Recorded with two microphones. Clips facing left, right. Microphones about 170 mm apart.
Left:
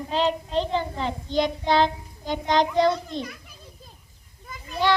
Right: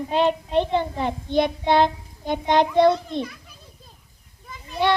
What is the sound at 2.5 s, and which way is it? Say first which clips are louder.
Speech: right 4 dB; 55° right (ahead or behind).